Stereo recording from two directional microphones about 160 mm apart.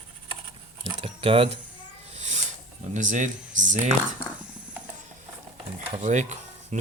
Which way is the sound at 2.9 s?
50° right (ahead or behind).